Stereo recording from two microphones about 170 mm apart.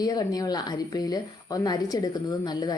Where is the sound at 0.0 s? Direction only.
20° left (ahead or behind).